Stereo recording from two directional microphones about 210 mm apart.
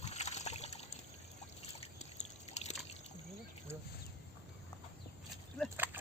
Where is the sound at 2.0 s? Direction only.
30° left (ahead or behind).